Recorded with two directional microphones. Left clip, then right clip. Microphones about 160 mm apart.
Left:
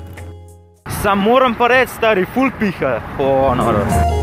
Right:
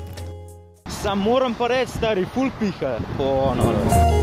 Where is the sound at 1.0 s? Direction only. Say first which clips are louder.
Left 8 dB; 20° right (ahead or behind).